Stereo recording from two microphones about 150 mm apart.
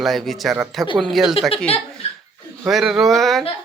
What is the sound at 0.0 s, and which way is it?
Speech, centre (ahead or behind).